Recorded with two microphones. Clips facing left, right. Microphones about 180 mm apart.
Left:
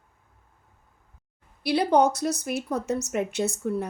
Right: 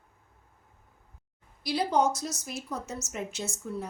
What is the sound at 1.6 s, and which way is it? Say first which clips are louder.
Speech: left 5 dB; 65° left (ahead or behind).